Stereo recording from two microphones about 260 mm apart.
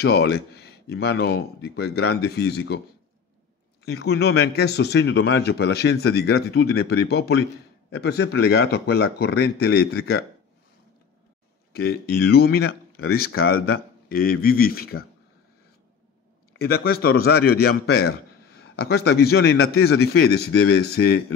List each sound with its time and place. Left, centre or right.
0.0 s a man's voice: left
3.8 s a man's voice: left
11.7 s a man's voice: left
16.5 s a man's voice: left